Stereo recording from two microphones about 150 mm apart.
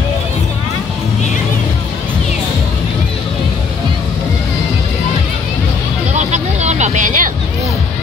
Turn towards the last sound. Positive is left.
turn(degrees=-55)  # may be behind; listen again after turning